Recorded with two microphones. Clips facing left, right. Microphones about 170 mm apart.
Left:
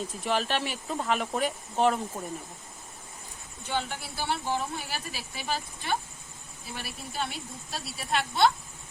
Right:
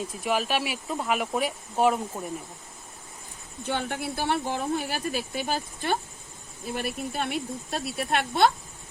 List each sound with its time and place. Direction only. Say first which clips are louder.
0.1 s speech: right 2 dB; 10° right (ahead or behind)
3.7 s speech: right 3 dB; 55° right (ahead or behind)